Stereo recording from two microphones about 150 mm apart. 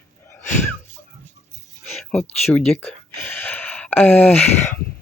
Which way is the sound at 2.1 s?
5° left (ahead or behind).